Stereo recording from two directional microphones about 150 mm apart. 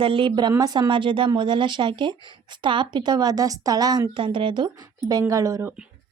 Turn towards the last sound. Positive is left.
turn(degrees=-5)  # may be behind; listen again after turning